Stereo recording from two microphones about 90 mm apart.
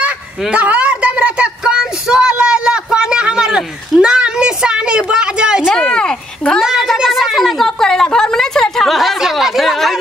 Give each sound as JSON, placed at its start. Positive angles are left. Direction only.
{"t": 0.5, "sound": "a woman's voice", "side_deg": -15}
{"t": 5.8, "sound": "speech", "side_deg": 10}
{"t": 6.6, "sound": "a sound", "side_deg": -5}